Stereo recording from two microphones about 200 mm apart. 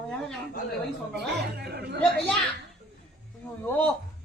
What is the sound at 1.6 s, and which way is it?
Speech, 50° right (ahead or behind).